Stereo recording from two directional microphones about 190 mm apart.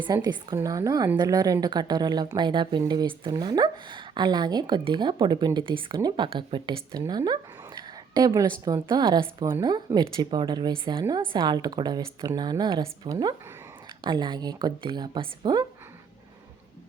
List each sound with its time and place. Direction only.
0.0 s speech: 25° right (ahead or behind)
7.0 s a sound: 20° right (ahead or behind)
8.6 s speech: 20° right (ahead or behind)